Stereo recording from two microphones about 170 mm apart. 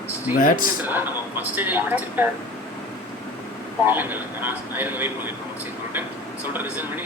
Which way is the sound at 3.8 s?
10° right (ahead or behind).